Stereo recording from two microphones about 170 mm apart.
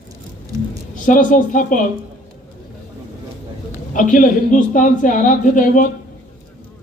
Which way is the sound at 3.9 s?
50° left (ahead or behind).